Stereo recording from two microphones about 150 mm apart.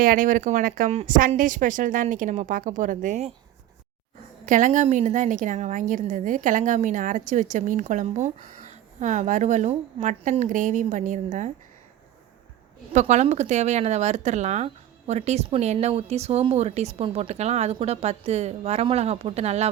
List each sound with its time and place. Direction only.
0.0 s a woman's voice: 65° right (ahead or behind); by 3.3 s 50° right (ahead or behind)
4.4 s a woman's voice: 60° right (ahead or behind)
12.9 s a woman's voice: 50° right (ahead or behind)